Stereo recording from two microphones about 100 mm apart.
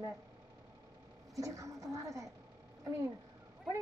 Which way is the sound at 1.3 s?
35° right (ahead or behind).